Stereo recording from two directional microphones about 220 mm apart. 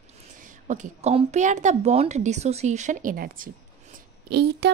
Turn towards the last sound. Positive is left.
turn(degrees=-50)  # may be behind; listen again after turning